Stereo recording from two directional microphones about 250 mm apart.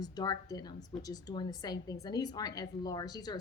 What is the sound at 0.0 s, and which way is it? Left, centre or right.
A woman's voice, centre.